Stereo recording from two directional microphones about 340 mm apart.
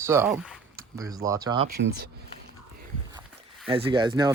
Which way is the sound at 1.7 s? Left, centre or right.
Right.